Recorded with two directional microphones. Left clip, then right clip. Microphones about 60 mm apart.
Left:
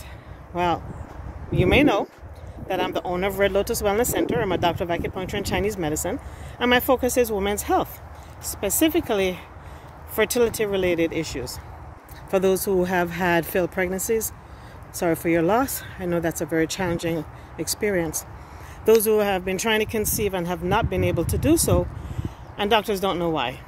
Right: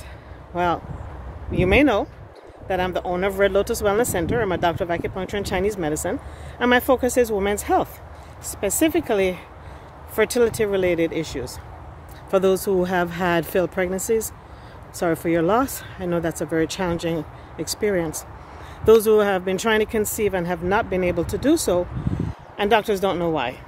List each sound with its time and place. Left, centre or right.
0.6 s speech: right
10.6 s speech: right
15.0 s speech: right
18.9 s speech: right
20.2 s speech: right
22.6 s speech: right
23.3 s speech: right